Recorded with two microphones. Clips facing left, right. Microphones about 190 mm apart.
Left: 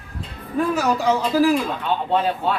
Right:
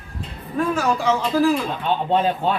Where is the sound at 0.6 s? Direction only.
5° left (ahead or behind).